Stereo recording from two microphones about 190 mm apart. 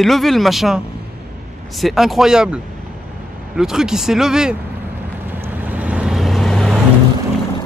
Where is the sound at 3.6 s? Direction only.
5° right (ahead or behind).